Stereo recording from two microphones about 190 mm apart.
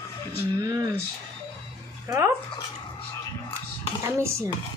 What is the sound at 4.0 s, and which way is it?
Speech, 15° right (ahead or behind).